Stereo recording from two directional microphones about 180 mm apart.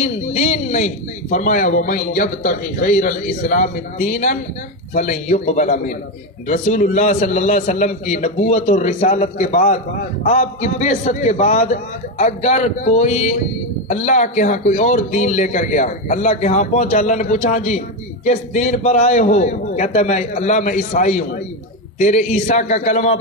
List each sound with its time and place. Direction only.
0.0 s speech: 40° left (ahead or behind)